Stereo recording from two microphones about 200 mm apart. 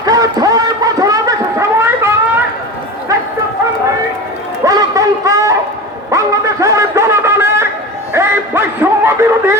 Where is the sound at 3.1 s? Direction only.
15° right (ahead or behind).